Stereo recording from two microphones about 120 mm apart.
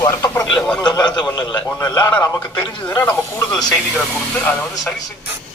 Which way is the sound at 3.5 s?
5° left (ahead or behind).